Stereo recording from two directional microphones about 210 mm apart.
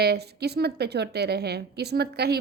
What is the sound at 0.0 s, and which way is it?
A woman's voice, 50° right (ahead or behind).